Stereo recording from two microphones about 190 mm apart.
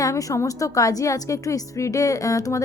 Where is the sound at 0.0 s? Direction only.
20° left (ahead or behind).